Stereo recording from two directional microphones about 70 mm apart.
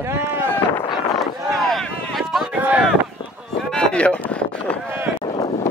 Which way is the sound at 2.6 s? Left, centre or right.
Centre.